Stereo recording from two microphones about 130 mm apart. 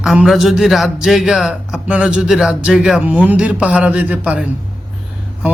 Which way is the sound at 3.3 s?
10° right (ahead or behind).